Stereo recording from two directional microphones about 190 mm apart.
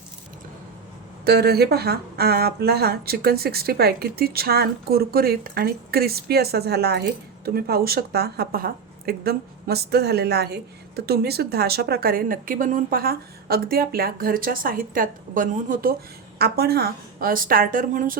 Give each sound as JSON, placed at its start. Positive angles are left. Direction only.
{"t": 1.2, "sound": "a woman's voice", "side_deg": -55}